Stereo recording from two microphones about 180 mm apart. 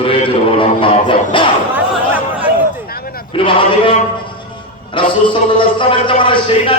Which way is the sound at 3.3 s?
30° left (ahead or behind).